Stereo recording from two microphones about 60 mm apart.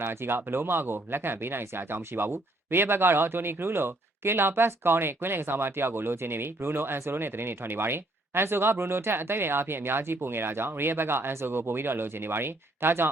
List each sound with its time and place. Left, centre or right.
0.0 s speech: right